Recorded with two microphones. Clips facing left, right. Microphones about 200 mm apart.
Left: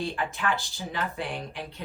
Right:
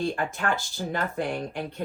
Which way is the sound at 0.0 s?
50° right (ahead or behind).